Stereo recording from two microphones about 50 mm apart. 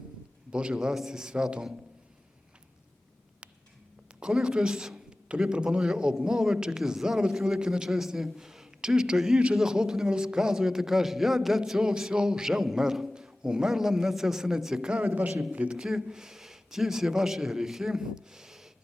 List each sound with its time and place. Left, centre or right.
0.5 s a man's voice: centre
4.2 s a man's voice: centre
15.8 s a man's voice: centre